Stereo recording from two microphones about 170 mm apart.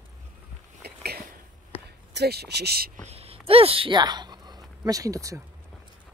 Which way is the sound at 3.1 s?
35° right (ahead or behind).